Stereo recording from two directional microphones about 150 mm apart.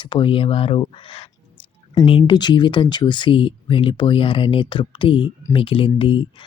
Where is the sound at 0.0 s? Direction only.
35° left (ahead or behind).